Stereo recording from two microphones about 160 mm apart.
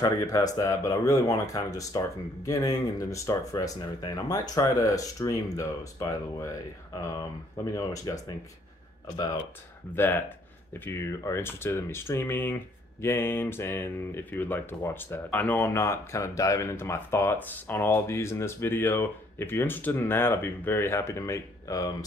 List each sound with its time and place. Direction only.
0.0 s speech: 20° left (ahead or behind)